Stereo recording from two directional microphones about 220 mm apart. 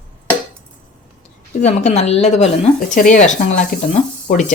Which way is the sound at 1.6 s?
30° left (ahead or behind).